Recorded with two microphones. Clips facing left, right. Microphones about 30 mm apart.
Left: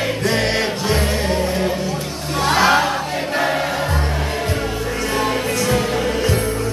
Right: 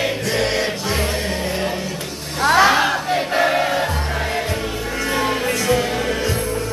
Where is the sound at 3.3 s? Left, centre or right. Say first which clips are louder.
Right 2 dB; centre.